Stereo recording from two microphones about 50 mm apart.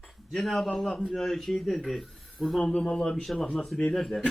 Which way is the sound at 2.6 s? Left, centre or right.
Centre.